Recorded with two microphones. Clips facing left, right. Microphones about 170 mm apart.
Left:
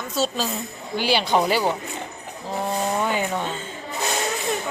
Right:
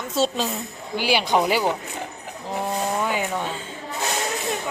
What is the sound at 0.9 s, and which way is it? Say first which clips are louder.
Speech: even; 10° right (ahead or behind).